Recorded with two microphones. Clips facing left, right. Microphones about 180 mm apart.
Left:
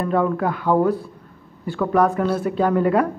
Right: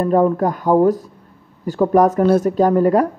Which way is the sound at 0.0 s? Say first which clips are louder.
Right 5 dB; 40° right (ahead or behind).